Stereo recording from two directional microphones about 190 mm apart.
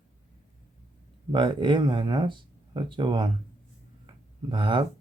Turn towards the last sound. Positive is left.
turn(degrees=-25)  # may be behind; listen again after turning